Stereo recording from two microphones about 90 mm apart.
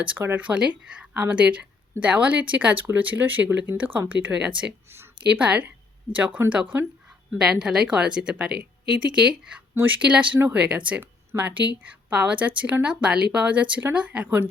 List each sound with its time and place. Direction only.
0.0 s speech: 20° right (ahead or behind)
1.1 s speech: 20° right (ahead or behind)